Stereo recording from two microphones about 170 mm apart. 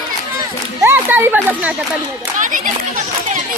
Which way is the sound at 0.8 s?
10° right (ahead or behind).